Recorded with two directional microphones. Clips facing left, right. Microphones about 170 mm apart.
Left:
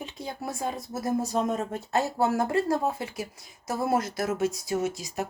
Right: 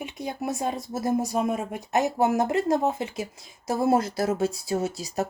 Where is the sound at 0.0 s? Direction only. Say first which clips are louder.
Right 4 dB; 15° right (ahead or behind).